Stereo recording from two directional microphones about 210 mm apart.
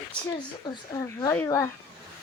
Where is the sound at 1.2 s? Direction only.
10° left (ahead or behind).